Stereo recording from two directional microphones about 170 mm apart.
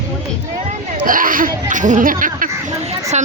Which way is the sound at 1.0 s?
55° right (ahead or behind).